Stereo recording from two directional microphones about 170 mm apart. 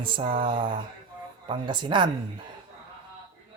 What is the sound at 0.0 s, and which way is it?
Speech, 30° right (ahead or behind).